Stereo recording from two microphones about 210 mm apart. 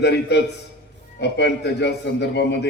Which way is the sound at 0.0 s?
55° left (ahead or behind).